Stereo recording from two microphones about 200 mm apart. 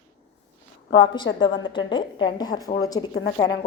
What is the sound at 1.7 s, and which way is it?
A woman's voice, 25° left (ahead or behind).